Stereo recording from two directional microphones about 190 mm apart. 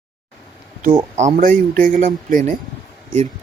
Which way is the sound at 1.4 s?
45° right (ahead or behind).